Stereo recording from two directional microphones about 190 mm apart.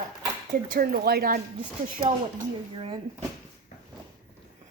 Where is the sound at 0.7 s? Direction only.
50° right (ahead or behind).